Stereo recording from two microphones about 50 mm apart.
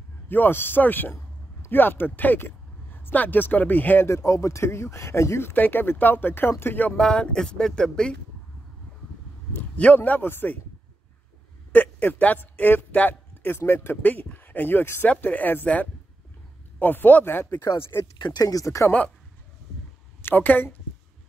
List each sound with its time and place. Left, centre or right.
0.3 s speech: left
4.1 s speech: left
5.5 s speech: left
7.0 s speech: centre
9.6 s speech: left
11.7 s a man's voice: left
15.0 s speech: left
15.6 s a man's voice: left
16.8 s speech: left
17.6 s speech: left
18.7 s speech: left
20.2 s a woman's voice: left